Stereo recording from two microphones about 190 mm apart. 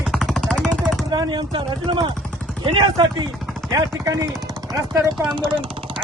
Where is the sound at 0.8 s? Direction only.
Centre (ahead or behind).